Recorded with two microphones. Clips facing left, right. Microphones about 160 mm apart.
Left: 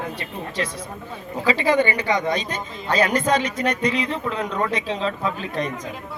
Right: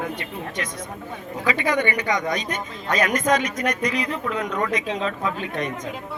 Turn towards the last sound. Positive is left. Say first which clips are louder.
# left 1 dB
turn(degrees=35)  # may be behind; listen again after turning